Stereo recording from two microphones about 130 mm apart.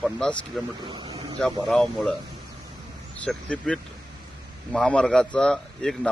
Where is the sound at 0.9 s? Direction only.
40° right (ahead or behind).